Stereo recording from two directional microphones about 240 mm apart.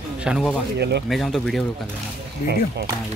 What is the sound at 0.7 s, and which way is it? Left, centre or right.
Speech, right.